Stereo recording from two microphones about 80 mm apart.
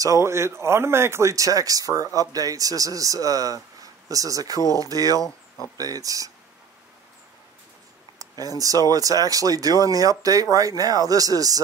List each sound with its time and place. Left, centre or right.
0.0 s speech: right
8.2 s speech: right